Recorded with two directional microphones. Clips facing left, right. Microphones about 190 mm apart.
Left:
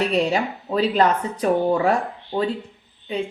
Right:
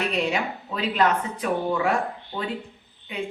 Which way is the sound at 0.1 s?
35° left (ahead or behind).